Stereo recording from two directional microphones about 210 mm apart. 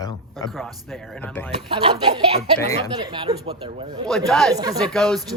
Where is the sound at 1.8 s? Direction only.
25° right (ahead or behind).